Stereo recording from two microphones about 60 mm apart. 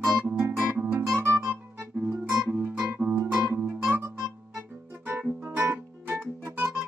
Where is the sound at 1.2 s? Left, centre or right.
Right.